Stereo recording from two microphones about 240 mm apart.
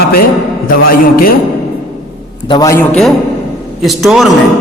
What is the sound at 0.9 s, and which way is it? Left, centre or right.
Speech, left.